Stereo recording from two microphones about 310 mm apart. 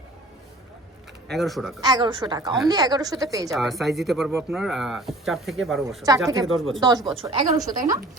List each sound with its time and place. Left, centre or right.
1.3 s speech: centre
1.8 s a woman's voice: centre
3.5 s speech: centre
6.1 s a woman's voice: centre